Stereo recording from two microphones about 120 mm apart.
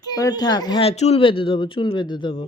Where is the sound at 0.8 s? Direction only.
60° left (ahead or behind); by 2.4 s 40° left (ahead or behind).